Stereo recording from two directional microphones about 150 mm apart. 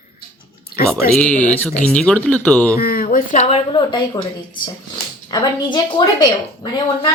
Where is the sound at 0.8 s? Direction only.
80° left.